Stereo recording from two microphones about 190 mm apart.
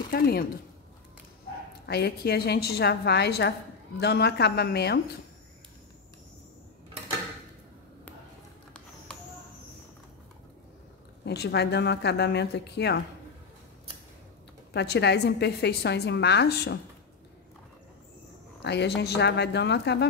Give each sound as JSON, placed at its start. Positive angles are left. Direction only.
{"t": 0.1, "sound": "speech", "side_deg": 55}
{"t": 1.9, "sound": "a woman's voice", "side_deg": 60}
{"t": 11.2, "sound": "a woman's voice", "side_deg": 60}
{"t": 14.7, "sound": "a woman's voice", "side_deg": 60}
{"t": 18.6, "sound": "a woman's voice", "side_deg": 65}